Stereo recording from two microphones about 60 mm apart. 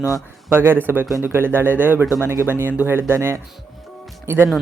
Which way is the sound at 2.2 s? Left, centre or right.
Right.